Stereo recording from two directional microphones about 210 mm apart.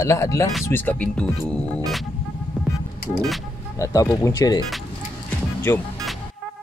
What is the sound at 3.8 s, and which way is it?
Speech, 15° left (ahead or behind).